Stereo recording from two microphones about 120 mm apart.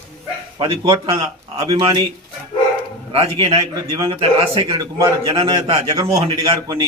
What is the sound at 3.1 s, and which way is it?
Speech, 50° right (ahead or behind).